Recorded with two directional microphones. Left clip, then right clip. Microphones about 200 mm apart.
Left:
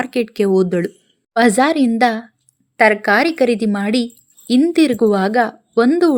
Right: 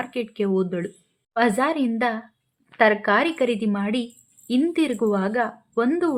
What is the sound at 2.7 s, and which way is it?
Speech, 10° left (ahead or behind).